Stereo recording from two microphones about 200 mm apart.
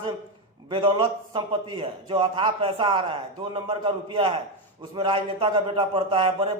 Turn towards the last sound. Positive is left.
turn(degrees=-25)  # may be behind; listen again after turning